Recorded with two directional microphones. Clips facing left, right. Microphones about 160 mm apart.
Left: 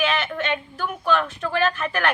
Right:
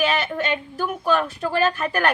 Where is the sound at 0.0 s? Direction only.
40° right (ahead or behind).